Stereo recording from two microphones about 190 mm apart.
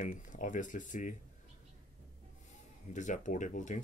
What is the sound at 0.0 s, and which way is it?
Speech, 40° left (ahead or behind).